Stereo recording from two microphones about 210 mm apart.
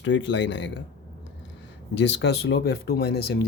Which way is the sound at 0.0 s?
60° left (ahead or behind).